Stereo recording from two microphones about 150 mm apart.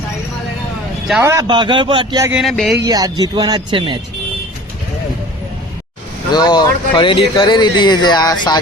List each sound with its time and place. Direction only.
1.2 s speech: 20° right (ahead or behind)
1.5 s a man's voice: 30° right (ahead or behind)
2.4 s speech: centre (ahead or behind)
2.8 s speech: 25° right (ahead or behind)
6.3 s speech: 30° left (ahead or behind)